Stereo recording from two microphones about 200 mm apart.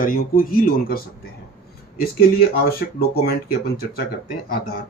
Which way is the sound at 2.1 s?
50° left (ahead or behind).